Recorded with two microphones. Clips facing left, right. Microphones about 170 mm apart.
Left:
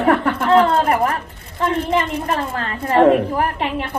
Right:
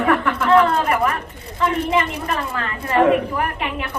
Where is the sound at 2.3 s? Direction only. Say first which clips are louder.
Left 2 dB; 50° left (ahead or behind).